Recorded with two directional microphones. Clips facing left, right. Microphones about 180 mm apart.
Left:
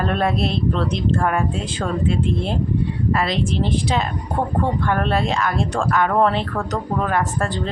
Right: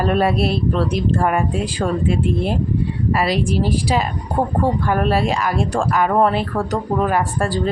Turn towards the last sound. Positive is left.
turn(degrees=-10)  # may be behind; listen again after turning